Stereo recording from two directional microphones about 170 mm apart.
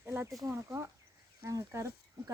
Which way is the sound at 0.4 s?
15° right (ahead or behind).